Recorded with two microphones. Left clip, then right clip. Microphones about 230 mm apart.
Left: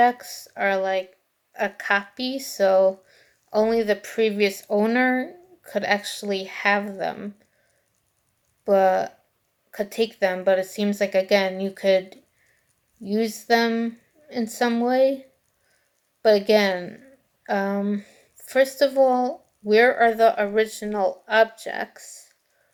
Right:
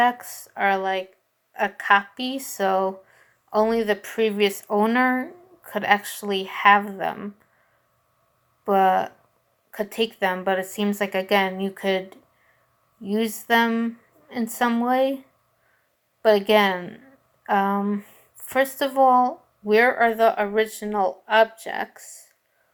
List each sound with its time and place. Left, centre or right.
0.2 s speech: centre
0.5 s a woman's voice: right
8.6 s a woman's voice: right
16.2 s a woman's voice: right